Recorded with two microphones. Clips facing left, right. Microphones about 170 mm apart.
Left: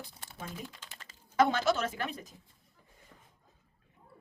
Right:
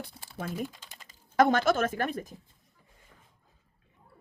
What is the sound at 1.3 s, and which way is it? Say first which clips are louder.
Speech: right 4 dB; 50° right (ahead or behind).